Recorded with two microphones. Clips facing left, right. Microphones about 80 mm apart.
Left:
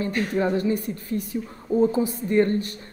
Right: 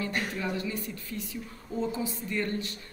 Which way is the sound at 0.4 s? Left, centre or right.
Left.